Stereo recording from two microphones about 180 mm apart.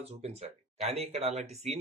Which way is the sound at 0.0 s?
35° right (ahead or behind).